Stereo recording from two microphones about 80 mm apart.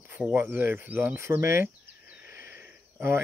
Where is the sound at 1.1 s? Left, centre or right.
Right.